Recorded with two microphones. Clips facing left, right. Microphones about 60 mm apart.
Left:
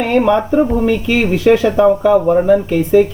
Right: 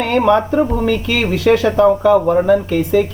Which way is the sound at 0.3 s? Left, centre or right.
Centre.